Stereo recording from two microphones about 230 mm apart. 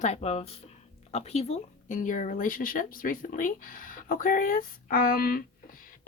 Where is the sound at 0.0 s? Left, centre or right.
Left.